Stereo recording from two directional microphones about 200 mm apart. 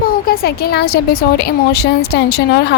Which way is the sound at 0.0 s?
45° left (ahead or behind).